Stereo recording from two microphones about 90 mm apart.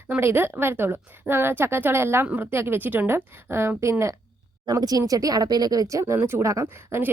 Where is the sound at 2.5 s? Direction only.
25° right (ahead or behind).